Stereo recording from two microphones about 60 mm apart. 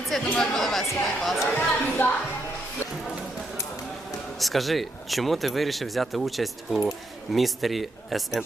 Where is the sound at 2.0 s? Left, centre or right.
Left.